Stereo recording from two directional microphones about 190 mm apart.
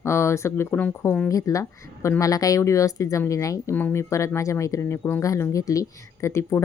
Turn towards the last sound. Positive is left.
turn(degrees=15)  # may be behind; listen again after turning